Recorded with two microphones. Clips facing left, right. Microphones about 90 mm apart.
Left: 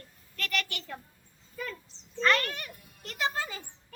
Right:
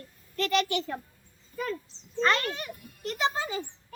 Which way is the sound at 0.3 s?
25° right (ahead or behind).